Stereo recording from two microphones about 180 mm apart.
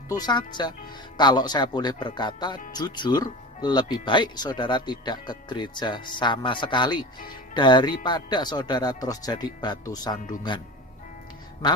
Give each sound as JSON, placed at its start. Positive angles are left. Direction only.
{"t": 0.1, "sound": "speech", "side_deg": 20}
{"t": 11.6, "sound": "speech", "side_deg": 25}